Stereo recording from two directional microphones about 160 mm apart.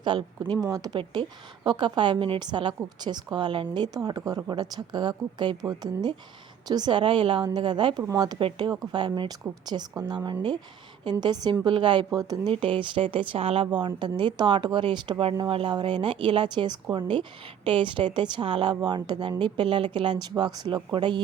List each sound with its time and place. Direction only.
0.0 s a woman's voice: 30° right (ahead or behind)
11.0 s a woman's voice: 25° right (ahead or behind)